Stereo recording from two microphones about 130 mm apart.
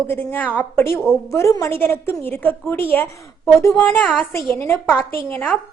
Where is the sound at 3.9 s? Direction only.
10° left (ahead or behind).